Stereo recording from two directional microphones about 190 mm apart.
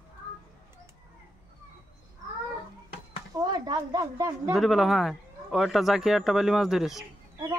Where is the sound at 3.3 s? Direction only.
20° right (ahead or behind).